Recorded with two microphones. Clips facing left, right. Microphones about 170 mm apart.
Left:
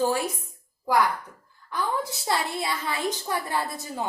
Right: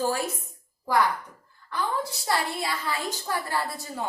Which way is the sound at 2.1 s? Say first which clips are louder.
Even; 20° left (ahead or behind).